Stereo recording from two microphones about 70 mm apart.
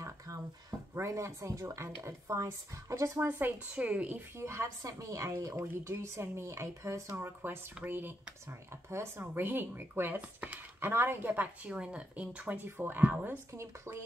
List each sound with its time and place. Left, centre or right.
0.0 s a sound: right
0.9 s speech: right
3.2 s speech: right
4.4 s speech: right
4.8 s speech: right
5.7 s speech: right
11.6 s speech: centre
13.5 s speech: right